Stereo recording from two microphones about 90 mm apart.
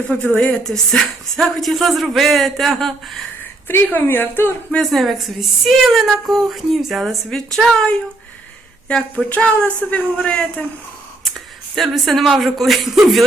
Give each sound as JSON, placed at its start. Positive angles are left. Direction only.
{"t": 0.3, "sound": "speech", "side_deg": 5}
{"t": 3.7, "sound": "a woman's voice", "side_deg": 25}
{"t": 4.8, "sound": "speech", "side_deg": 0}
{"t": 11.7, "sound": "speech", "side_deg": 0}